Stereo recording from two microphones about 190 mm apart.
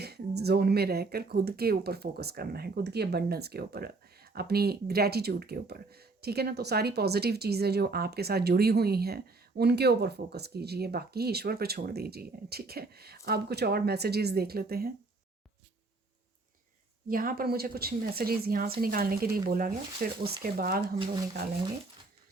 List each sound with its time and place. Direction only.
0.0 s speech: 60° right (ahead or behind)
17.1 s speech: 50° right (ahead or behind)